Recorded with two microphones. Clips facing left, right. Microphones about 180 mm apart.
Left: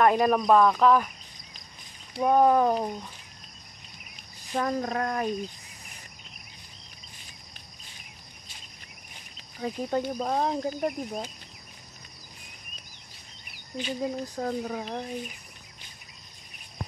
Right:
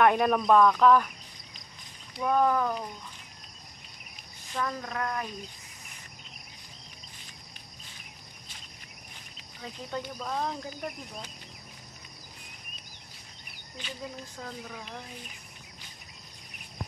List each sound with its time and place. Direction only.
0.0 s speech: 5° left (ahead or behind)
2.1 s speech: 25° left (ahead or behind)
2.7 s speech: 40° left (ahead or behind)
4.6 s speech: 40° left (ahead or behind)
9.6 s speech: 40° left (ahead or behind)
14.0 s speech: 40° left (ahead or behind)